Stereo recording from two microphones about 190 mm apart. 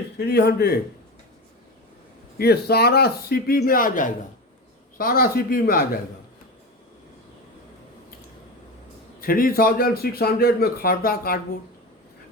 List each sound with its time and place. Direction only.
0.2 s speech: 55° left (ahead or behind)
2.4 s a man's voice: 55° left (ahead or behind)
9.2 s a man's voice: 50° left (ahead or behind)